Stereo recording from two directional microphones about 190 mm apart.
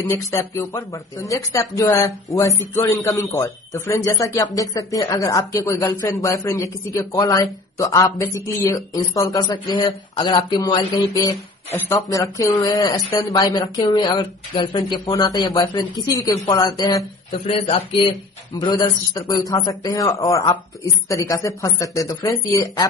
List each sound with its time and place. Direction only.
0.0 s speech: 15° left (ahead or behind); by 17.8 s 30° left (ahead or behind)
18.6 s speech: 20° left (ahead or behind)